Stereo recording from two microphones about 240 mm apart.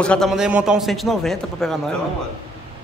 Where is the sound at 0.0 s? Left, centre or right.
Centre.